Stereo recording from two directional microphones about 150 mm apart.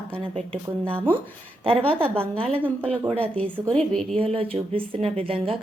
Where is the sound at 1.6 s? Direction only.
40° right (ahead or behind).